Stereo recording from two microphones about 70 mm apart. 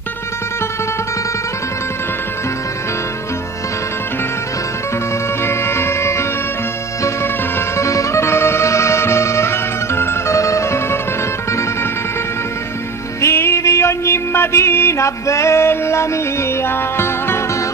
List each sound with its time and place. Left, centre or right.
5.4 s music: left
7.5 s music: left
13.2 s music: left